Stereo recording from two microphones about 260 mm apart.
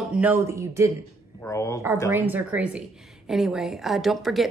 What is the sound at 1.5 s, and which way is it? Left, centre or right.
Speech, centre.